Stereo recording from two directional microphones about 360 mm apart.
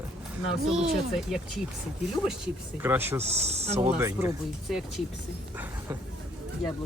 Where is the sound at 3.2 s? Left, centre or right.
Centre.